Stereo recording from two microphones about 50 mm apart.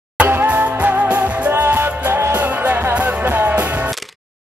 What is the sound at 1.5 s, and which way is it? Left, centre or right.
Music, right.